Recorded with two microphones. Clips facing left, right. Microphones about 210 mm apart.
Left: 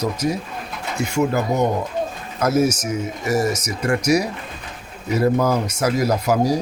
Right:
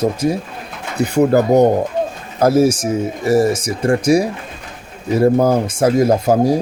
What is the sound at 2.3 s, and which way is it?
Speech, 30° right (ahead or behind).